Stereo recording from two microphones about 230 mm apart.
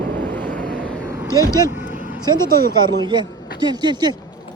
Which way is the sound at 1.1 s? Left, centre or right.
Centre.